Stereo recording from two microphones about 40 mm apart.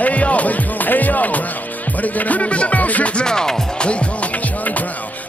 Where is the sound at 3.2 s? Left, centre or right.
Centre.